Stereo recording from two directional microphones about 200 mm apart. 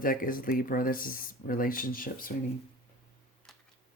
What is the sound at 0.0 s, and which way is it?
Speech, 45° left (ahead or behind).